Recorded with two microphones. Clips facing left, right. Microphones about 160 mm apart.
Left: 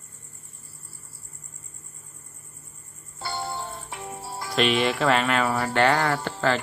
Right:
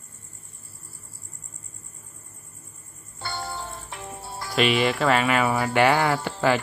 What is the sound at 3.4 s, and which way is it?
Music, 20° left (ahead or behind).